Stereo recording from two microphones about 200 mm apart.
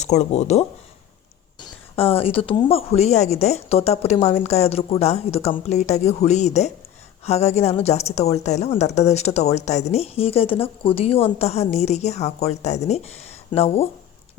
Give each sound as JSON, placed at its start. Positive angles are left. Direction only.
{"t": 0.0, "sound": "speech", "side_deg": 35}
{"t": 1.6, "sound": "speech", "side_deg": 30}